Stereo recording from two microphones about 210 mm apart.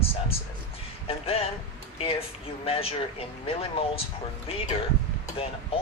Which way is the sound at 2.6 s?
25° left (ahead or behind).